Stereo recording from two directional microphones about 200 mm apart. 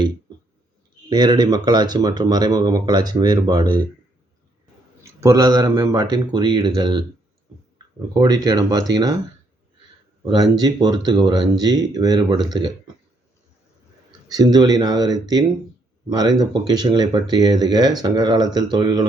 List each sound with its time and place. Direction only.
1.1 s speech: 20° right (ahead or behind)
5.2 s speech: 15° right (ahead or behind)
8.2 s speech: 20° right (ahead or behind)
10.3 s speech: 20° right (ahead or behind)
14.3 s speech: 20° right (ahead or behind)